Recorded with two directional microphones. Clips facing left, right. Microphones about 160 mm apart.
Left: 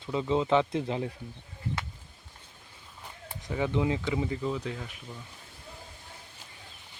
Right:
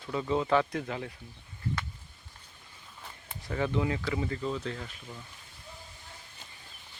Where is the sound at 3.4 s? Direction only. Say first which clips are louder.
Left 2 dB; 15° left (ahead or behind).